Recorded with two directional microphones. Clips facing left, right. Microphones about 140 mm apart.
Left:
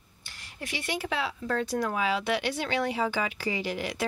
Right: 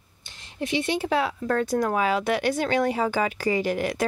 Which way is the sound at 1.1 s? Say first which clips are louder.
Right 6 dB; 50° right (ahead or behind).